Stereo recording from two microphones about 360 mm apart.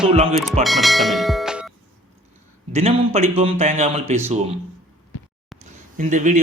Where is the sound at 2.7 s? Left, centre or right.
Centre.